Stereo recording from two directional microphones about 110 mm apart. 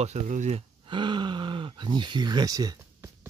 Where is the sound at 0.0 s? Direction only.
85° right.